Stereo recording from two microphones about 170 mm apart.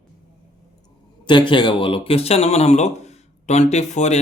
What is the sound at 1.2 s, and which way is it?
Speech, 30° left (ahead or behind).